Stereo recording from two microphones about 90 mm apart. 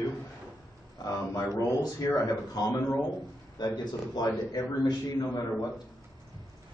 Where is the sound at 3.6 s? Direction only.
50° left (ahead or behind).